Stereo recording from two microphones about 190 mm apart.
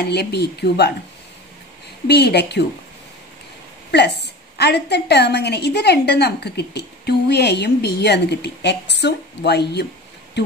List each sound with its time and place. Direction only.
0.1 s a woman's voice: 60° left (ahead or behind)
2.0 s a woman's voice: 60° left (ahead or behind)
3.9 s a woman's voice: 60° left (ahead or behind)